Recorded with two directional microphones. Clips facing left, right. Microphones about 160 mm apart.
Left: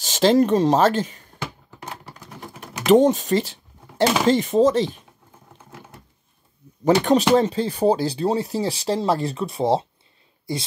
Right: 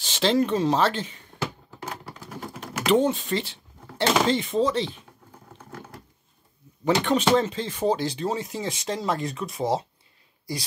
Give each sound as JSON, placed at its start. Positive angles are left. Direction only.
{"t": 0.0, "sound": "speech", "side_deg": 45}
{"t": 1.9, "sound": "typing", "side_deg": 20}
{"t": 2.9, "sound": "speech", "side_deg": 40}
{"t": 6.8, "sound": "speech", "side_deg": 40}